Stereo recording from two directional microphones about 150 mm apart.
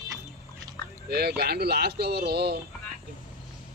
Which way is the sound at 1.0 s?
90° right.